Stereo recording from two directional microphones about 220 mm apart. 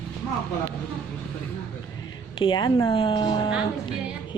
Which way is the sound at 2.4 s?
20° left (ahead or behind).